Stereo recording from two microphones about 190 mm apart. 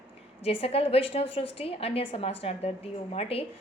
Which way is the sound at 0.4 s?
30° left (ahead or behind).